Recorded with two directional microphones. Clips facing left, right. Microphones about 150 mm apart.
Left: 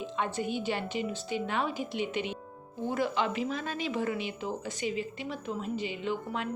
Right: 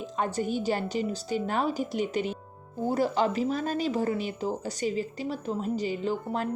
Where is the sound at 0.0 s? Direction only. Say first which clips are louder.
Right 3 dB; 40° right (ahead or behind).